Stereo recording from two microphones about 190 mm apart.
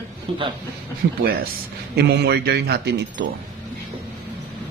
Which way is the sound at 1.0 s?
50° right (ahead or behind).